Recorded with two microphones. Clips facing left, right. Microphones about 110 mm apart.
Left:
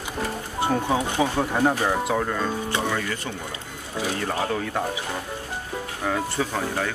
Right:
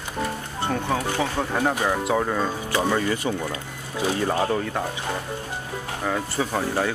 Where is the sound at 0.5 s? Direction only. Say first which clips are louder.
Left 3 dB; 10° left (ahead or behind).